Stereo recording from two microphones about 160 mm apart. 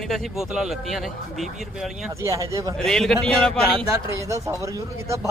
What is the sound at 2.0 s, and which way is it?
Speech, 20° right (ahead or behind).